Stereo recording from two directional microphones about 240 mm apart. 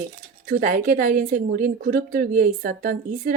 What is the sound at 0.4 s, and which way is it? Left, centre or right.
Speech, right.